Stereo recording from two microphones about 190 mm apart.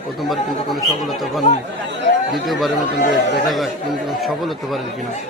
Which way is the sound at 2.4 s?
Centre (ahead or behind).